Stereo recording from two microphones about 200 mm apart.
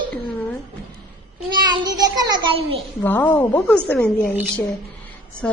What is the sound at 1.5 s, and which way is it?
A child's voice, 20° right (ahead or behind).